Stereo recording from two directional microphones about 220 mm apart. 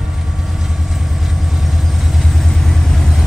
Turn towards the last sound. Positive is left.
turn(degrees=0)  # may be behind; listen again after turning